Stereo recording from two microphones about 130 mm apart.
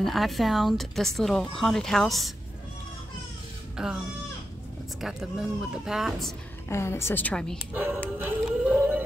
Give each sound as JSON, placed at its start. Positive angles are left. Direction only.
{"t": 0.0, "sound": "speech", "side_deg": 0}
{"t": 3.7, "sound": "a child's voice", "side_deg": -5}
{"t": 5.0, "sound": "speech", "side_deg": -5}
{"t": 6.7, "sound": "a woman's voice", "side_deg": 20}
{"t": 7.7, "sound": "speech", "side_deg": -10}
{"t": 8.5, "sound": "howl", "side_deg": -10}